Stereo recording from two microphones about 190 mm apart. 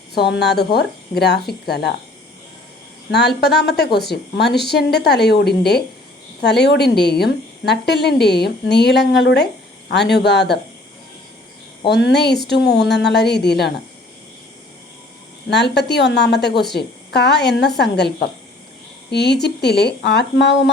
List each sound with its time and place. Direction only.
0.1 s a woman's voice: 60° left (ahead or behind)
3.1 s a woman's voice: 60° left (ahead or behind)
11.9 s a woman's voice: 65° left (ahead or behind)
15.4 s a woman's voice: 60° left (ahead or behind)